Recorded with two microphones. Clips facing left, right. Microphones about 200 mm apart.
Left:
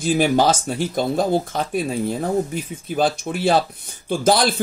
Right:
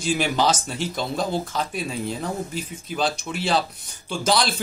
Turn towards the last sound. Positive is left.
turn(degrees=50)  # may be behind; listen again after turning